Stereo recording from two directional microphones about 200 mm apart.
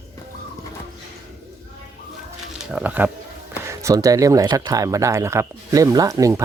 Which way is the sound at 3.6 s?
15° right (ahead or behind).